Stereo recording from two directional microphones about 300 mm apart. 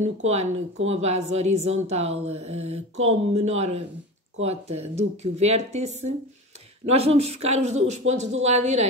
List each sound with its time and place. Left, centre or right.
0.3 s speech: right